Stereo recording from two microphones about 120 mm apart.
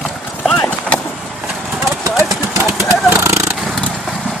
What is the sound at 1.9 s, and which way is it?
Vehicle, 25° right (ahead or behind).